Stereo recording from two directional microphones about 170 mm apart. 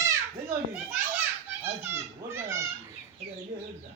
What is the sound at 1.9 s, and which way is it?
Children playing, 15° right (ahead or behind).